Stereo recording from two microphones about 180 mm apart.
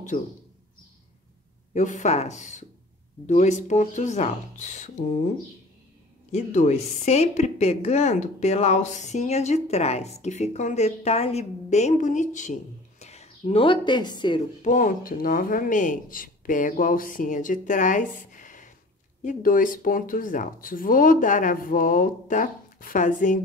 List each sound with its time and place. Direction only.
1.7 s a woman's voice: 45° left (ahead or behind)
6.3 s a woman's voice: 40° left (ahead or behind); by 14.4 s 25° left (ahead or behind)
14.6 s speech: 45° left (ahead or behind)